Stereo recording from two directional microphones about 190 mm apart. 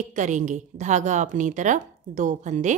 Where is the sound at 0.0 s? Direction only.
40° right (ahead or behind).